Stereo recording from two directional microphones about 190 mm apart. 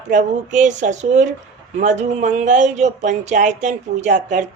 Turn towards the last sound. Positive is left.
turn(degrees=-40)  # may be behind; listen again after turning